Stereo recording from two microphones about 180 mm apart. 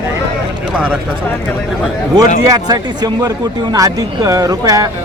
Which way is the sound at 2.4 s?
20° right (ahead or behind).